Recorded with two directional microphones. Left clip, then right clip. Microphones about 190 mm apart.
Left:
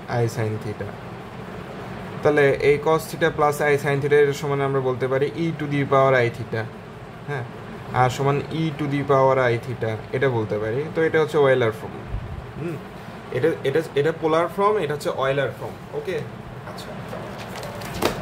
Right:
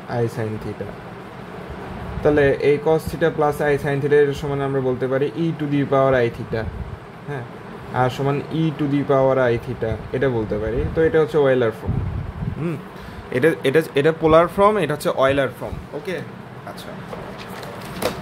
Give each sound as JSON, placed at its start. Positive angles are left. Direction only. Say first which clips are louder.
{"t": 2.2, "sound": "speech", "louder": "right 1 dB", "side_deg": -10}
{"t": 7.9, "sound": "speech", "louder": "even", "side_deg": -10}
{"t": 13.3, "sound": "speech", "louder": "right 4 dB", "side_deg": -45}